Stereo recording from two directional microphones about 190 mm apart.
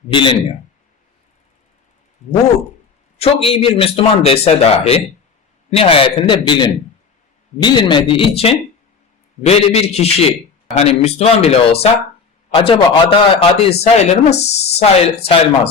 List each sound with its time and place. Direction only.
0.1 s speech: 25° left (ahead or behind)
3.2 s a man's voice: 30° left (ahead or behind)